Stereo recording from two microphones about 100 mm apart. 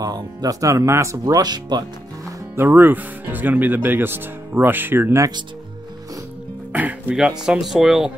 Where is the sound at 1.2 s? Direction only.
40° right (ahead or behind).